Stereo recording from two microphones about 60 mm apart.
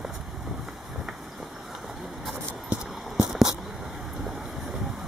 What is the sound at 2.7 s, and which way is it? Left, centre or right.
Clip-clop, centre.